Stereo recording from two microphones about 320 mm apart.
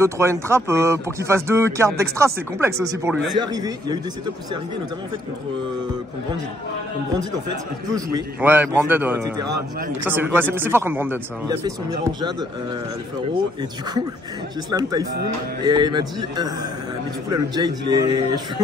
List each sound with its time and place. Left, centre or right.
0.0 s speech: centre
8.1 s speech: centre
14.7 s speech: centre